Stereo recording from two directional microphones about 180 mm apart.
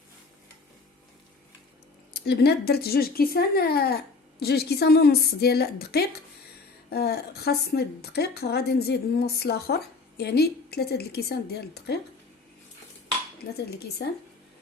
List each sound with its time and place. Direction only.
2.1 s a woman's voice: 65° left (ahead or behind)
13.4 s a woman's voice: 60° left (ahead or behind)